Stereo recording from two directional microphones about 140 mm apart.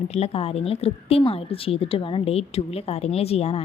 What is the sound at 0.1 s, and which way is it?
Speech, 45° left (ahead or behind).